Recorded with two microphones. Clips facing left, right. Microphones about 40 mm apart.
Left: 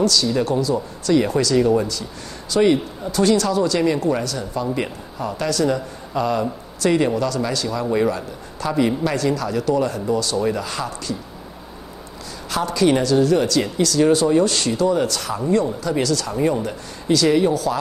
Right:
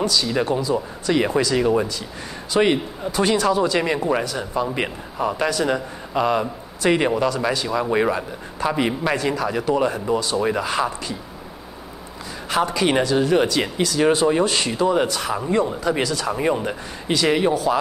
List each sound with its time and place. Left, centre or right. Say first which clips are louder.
0.0 s speech: left 2 dB; centre
12.4 s speech: left 2 dB; right